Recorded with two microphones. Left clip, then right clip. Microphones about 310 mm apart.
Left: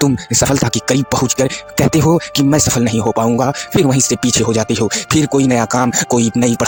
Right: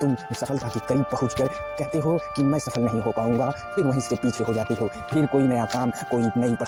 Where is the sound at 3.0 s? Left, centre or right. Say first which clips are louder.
Left 11 dB; left.